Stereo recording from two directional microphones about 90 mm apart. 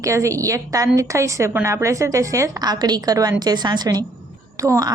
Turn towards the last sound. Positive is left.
turn(degrees=-40)  # may be behind; listen again after turning